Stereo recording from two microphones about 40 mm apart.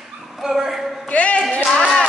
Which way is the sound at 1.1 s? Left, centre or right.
Left.